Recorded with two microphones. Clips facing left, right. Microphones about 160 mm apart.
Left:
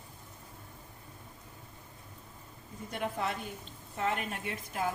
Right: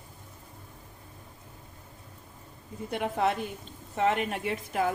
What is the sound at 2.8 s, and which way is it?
A woman's voice, 80° right.